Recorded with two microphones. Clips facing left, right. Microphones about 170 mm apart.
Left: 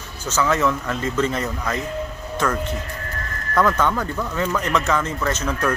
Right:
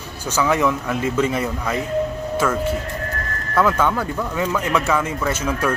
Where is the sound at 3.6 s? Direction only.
10° right (ahead or behind).